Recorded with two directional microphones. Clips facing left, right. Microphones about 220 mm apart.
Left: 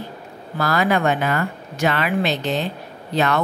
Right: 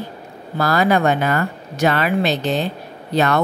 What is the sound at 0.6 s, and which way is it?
Speech, 35° right (ahead or behind).